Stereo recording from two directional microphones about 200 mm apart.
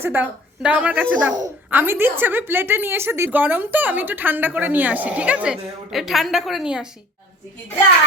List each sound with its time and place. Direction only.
0.0 s a woman's voice: 10° right (ahead or behind)